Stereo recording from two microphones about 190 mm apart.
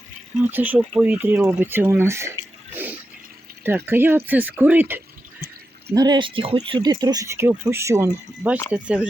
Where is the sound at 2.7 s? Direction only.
10° right (ahead or behind).